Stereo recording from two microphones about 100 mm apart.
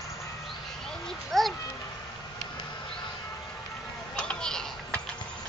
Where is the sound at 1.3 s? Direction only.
Centre (ahead or behind).